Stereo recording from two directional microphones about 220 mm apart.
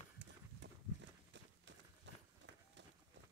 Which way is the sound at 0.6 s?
50° right (ahead or behind).